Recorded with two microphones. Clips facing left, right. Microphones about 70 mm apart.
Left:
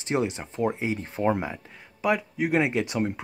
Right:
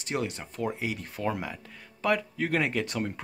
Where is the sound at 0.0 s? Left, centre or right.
Left.